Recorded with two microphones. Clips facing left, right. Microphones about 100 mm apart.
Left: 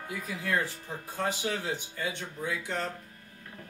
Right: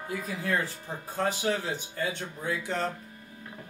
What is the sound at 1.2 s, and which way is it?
Speech, 40° right (ahead or behind).